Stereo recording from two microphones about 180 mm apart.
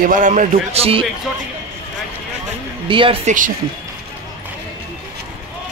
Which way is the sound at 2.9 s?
30° right (ahead or behind).